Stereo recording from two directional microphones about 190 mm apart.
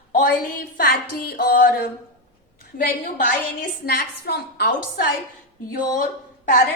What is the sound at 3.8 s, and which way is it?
A woman's voice, 55° left (ahead or behind).